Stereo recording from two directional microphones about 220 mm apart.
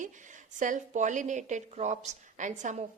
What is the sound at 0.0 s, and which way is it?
A woman's voice, 35° right (ahead or behind).